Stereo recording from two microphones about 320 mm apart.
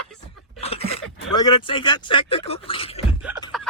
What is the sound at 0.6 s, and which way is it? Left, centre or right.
Speech, centre.